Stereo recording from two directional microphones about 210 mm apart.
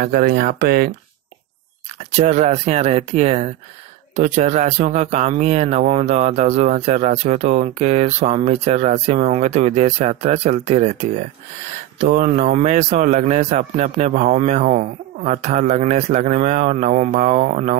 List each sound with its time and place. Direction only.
0.0 s speech: 50° right (ahead or behind)
2.1 s speech: 35° right (ahead or behind)